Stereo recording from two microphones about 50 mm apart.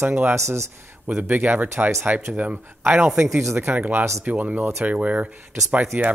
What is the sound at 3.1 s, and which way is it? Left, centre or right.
Speech, right.